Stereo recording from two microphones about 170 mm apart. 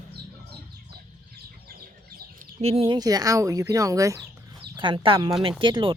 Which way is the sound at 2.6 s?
35° right (ahead or behind).